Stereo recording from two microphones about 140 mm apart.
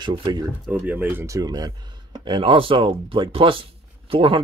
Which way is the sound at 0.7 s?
10° right (ahead or behind).